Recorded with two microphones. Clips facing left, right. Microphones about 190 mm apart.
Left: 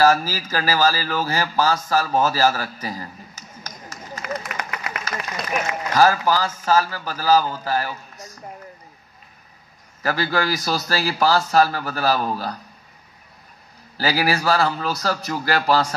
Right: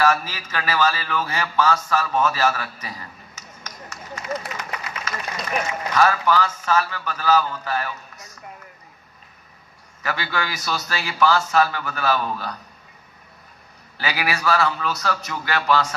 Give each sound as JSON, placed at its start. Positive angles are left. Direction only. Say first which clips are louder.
{"t": 0.0, "sound": "speech", "louder": "left 4 dB", "side_deg": 35}
{"t": 4.6, "sound": "vehicle", "louder": "left 2 dB", "side_deg": 60}
{"t": 5.9, "sound": "a man's voice", "louder": "left 2 dB", "side_deg": 35}
{"t": 10.0, "sound": "a man's voice", "louder": "left 5 dB", "side_deg": 35}
{"t": 13.9, "sound": "a man's voice", "louder": "left 5 dB", "side_deg": 35}